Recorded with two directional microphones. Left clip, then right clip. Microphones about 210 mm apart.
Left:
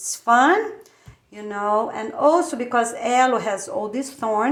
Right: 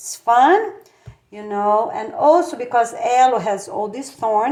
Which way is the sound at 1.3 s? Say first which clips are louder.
Right 4 dB; 20° left (ahead or behind).